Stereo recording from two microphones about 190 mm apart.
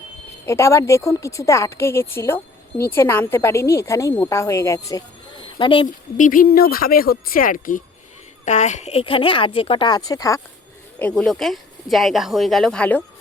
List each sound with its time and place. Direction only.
0.4 s a woman's voice: 15° left (ahead or behind)
6.1 s a woman's voice: 45° left (ahead or behind); by 10.4 s 20° left (ahead or behind)
11.0 s speech: 5° left (ahead or behind)